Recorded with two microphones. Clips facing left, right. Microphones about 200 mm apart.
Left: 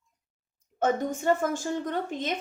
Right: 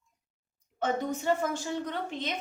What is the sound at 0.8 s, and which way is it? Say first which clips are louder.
A woman's voice: left 4 dB; 45° left (ahead or behind).